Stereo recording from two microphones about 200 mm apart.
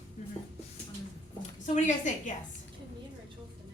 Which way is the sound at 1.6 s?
35° left (ahead or behind).